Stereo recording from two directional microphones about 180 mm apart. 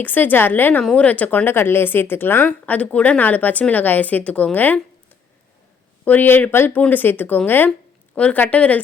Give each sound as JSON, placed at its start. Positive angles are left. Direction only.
{"t": 0.0, "sound": "a woman's voice", "side_deg": 10}
{"t": 6.1, "sound": "a woman's voice", "side_deg": 10}